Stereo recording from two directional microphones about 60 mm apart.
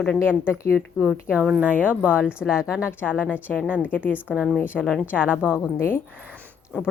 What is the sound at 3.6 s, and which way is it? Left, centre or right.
Speech, right.